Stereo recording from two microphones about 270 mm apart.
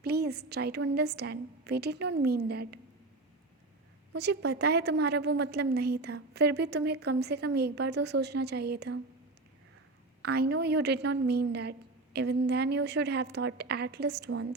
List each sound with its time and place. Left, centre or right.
0.0 s a woman's voice: right
4.1 s a woman's voice: right
10.2 s a woman's voice: right